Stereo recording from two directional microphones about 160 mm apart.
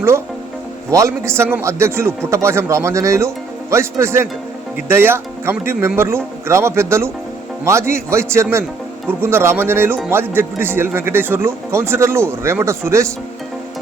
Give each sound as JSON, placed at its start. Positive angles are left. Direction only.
{"t": 0.9, "sound": "a man's voice", "side_deg": -20}